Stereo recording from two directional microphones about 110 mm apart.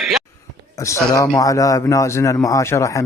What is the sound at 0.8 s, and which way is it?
Speech, 30° left (ahead or behind).